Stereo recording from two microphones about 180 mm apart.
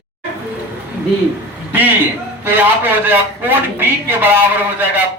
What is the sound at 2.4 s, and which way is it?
A man's voice, 10° right (ahead or behind).